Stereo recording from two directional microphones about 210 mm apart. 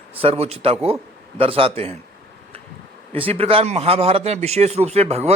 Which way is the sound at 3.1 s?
25° right (ahead or behind).